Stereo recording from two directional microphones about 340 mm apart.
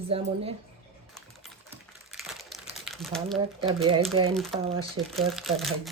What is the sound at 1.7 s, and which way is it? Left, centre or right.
Crumpling, centre.